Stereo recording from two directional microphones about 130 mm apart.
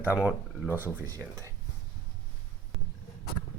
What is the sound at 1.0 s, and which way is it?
Speech, 25° right (ahead or behind).